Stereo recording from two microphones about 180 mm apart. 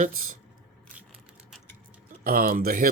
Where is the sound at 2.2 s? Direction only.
55° right (ahead or behind).